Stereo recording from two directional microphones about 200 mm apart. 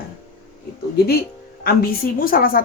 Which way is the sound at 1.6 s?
50° left (ahead or behind).